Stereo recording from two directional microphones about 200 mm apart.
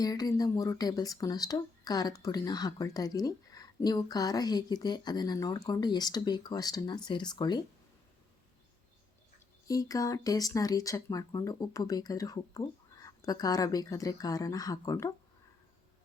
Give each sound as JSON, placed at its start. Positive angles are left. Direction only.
{"t": 0.0, "sound": "speech", "side_deg": 20}
{"t": 9.6, "sound": "speech", "side_deg": 15}